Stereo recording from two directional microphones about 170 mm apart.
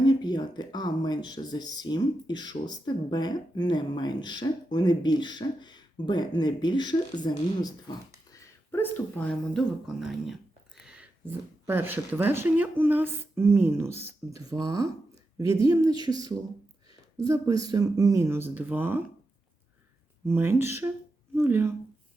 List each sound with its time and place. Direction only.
0.0 s speech: 25° left (ahead or behind); by 16.1 s 20° right (ahead or behind)
17.2 s speech: 20° right (ahead or behind)
20.2 s speech: 15° right (ahead or behind)